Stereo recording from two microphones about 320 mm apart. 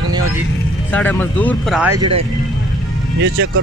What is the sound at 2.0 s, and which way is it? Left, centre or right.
Speech, right.